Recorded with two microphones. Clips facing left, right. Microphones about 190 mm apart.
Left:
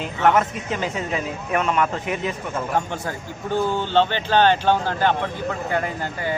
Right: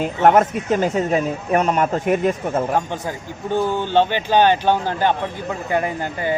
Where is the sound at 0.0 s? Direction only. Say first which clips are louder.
Right 4 dB; 45° right (ahead or behind).